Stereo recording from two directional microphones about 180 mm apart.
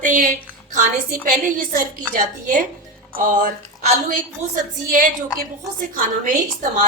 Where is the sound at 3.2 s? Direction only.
45° right (ahead or behind).